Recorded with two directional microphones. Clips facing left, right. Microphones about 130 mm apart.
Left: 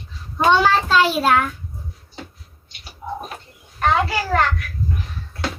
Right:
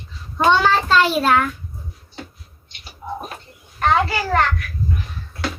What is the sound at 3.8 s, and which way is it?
Speech, 5° left (ahead or behind).